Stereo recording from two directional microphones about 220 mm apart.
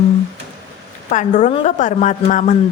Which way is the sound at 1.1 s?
35° left (ahead or behind).